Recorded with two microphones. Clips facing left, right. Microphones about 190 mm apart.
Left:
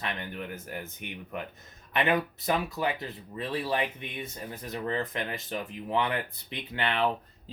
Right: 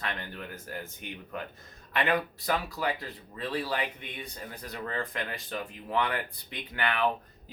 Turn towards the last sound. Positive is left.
turn(degrees=25)  # may be behind; listen again after turning